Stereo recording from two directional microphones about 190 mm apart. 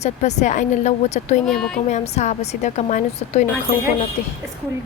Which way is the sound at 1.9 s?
35° left (ahead or behind).